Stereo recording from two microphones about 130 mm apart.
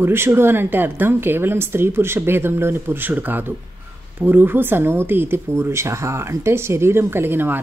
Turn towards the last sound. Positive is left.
turn(degrees=-15)  # may be behind; listen again after turning